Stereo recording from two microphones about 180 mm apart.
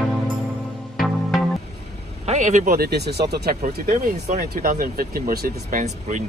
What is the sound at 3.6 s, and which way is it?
Speech, 45° right (ahead or behind).